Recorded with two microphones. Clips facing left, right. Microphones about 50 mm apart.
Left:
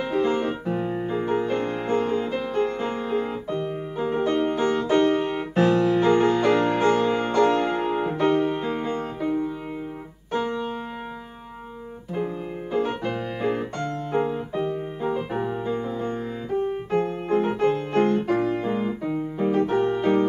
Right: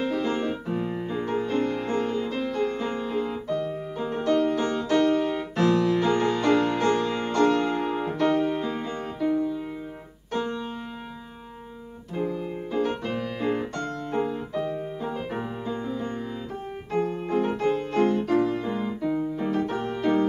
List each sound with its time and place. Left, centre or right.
0.0 s music: centre
4.9 s music: left
5.6 s music: left
8.6 s music: centre
10.3 s music: centre
13.0 s piano: centre
14.1 s music: left
16.9 s keyboard: centre
17.6 s music: centre
18.2 s piano: left
20.0 s music: left